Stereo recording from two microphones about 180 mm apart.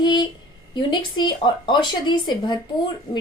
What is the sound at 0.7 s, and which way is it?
A woman's voice, 25° left (ahead or behind).